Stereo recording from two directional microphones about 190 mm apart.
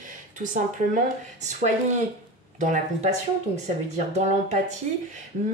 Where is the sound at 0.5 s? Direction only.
40° right (ahead or behind).